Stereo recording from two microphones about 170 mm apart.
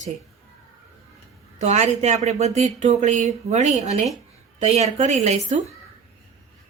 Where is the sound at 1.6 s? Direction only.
40° right (ahead or behind).